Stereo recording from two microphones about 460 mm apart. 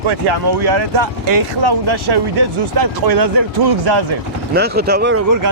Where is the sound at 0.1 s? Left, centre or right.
Right.